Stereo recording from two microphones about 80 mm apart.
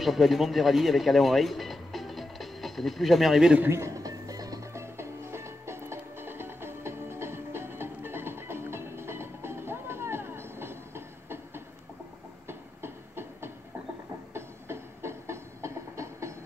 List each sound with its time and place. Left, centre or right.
0.0 s speech: centre
3.6 s music: right
4.7 s music: right
12.4 s a sound: right
14.3 s train: right